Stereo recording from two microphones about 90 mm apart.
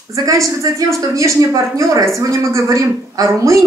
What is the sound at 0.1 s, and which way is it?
A woman's voice, 40° right (ahead or behind).